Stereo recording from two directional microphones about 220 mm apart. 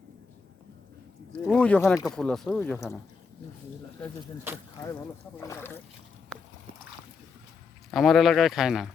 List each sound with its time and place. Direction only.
1.3 s speech: 5° left (ahead or behind)
4.5 s speech: 10° right (ahead or behind)
5.4 s speech: 10° left (ahead or behind)
7.9 s speech: centre (ahead or behind)